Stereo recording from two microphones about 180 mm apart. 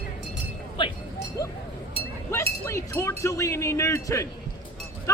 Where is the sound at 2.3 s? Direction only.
15° left (ahead or behind).